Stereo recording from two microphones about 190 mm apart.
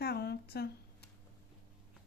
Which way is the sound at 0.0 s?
60° left (ahead or behind).